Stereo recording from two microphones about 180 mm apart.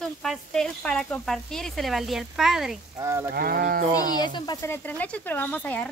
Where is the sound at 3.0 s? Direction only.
15° right (ahead or behind).